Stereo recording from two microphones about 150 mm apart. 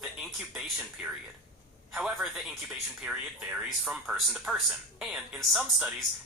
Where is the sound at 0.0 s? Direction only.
5° right (ahead or behind).